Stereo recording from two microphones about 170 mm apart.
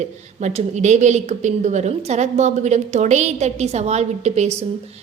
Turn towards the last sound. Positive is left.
turn(degrees=-40)  # may be behind; listen again after turning